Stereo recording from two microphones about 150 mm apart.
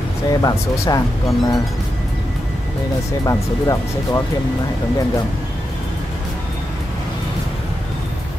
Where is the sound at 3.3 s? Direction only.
20° left (ahead or behind).